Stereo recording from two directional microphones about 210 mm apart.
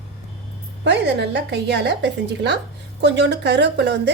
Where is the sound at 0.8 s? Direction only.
55° right (ahead or behind).